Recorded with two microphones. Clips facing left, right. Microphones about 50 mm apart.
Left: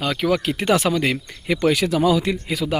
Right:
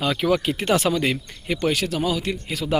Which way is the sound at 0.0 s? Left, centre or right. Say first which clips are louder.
Even; left.